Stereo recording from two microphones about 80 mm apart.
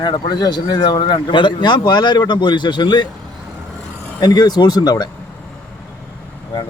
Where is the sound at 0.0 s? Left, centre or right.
Left.